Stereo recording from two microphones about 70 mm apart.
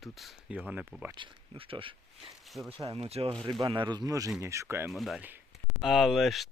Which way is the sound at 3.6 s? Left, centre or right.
Right.